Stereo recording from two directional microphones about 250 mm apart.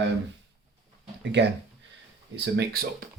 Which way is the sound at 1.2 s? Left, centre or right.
Right.